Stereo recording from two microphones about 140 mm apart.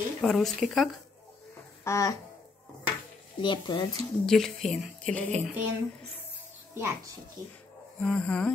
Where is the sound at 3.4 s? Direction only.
35° left (ahead or behind).